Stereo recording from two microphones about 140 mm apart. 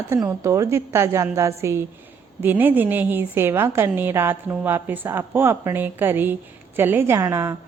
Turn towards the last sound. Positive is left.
turn(degrees=-20)  # may be behind; listen again after turning